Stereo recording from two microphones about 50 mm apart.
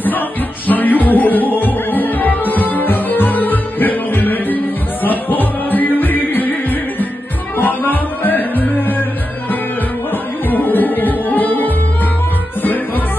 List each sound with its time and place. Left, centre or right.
0.7 s music: left
10.5 s music: left